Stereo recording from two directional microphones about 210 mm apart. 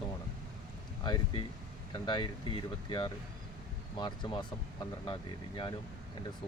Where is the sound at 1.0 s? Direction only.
20° left (ahead or behind).